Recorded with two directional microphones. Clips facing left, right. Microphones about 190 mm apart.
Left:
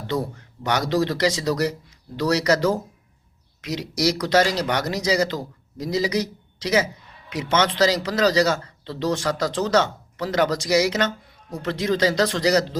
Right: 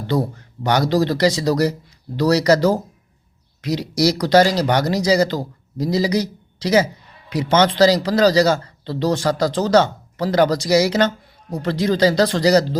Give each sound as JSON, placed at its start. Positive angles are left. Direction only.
{"t": 0.1, "sound": "a man's voice", "side_deg": -35}